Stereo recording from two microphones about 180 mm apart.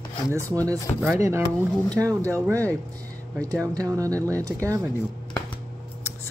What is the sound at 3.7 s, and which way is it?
Speech, 20° right (ahead or behind).